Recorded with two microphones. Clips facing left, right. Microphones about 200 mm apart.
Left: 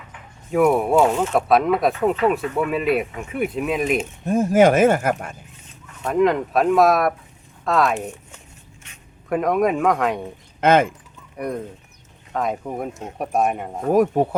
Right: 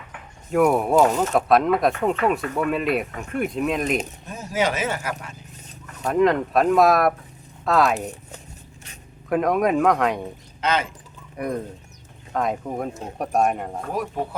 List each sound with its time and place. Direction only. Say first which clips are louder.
0.5 s speech: left 1 dB; centre (ahead or behind)
4.3 s speech: left 10 dB; 50° left (ahead or behind)
6.0 s speech: left 1 dB; centre (ahead or behind)
9.3 s speech: left 1 dB; centre (ahead or behind)
10.6 s speech: left 8 dB; 50° left (ahead or behind)
11.3 s speech: even; centre (ahead or behind)
13.9 s speech: left 13 dB; 50° left (ahead or behind)